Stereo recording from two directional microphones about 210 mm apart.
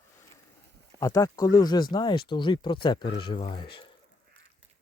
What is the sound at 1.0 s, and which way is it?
Speech, 15° left (ahead or behind).